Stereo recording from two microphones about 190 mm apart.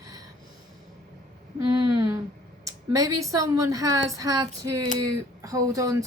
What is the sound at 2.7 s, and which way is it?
A woman's voice, 15° right (ahead or behind).